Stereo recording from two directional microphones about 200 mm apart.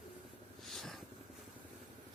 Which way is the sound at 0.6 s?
Centre (ahead or behind).